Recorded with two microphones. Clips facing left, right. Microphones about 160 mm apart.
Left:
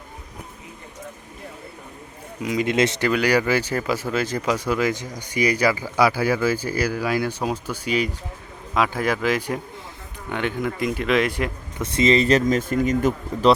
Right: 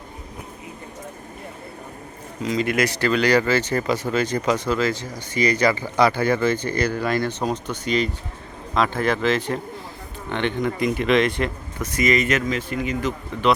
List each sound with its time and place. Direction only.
2.4 s speech: 15° left (ahead or behind)
3.1 s speech: 10° left (ahead or behind)
11.8 s speech: 30° left (ahead or behind); by 13.5 s 45° left (ahead or behind)